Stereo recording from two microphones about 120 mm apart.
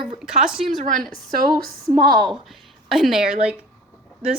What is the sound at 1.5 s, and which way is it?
Speech, 35° right (ahead or behind).